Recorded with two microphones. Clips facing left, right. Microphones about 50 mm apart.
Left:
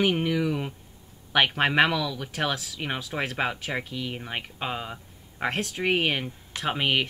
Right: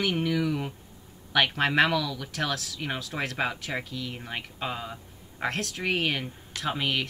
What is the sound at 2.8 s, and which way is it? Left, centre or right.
Speech, left.